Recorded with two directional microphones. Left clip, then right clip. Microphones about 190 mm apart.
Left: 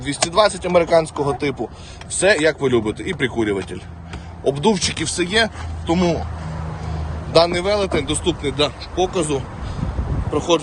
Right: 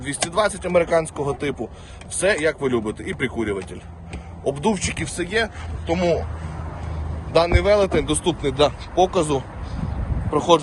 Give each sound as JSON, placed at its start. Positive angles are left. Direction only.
{"t": 0.0, "sound": "speech", "side_deg": 20}
{"t": 7.3, "sound": "speech", "side_deg": 20}